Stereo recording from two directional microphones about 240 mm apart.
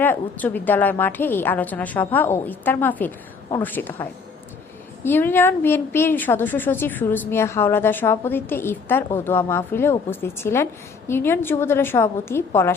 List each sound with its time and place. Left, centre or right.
0.0 s a woman's voice: centre
5.0 s a woman's voice: centre